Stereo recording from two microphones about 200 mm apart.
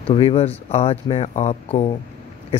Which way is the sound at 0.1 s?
30° left (ahead or behind).